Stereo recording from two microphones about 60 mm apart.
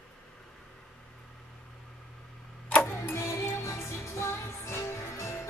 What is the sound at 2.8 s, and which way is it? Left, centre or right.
Music, left.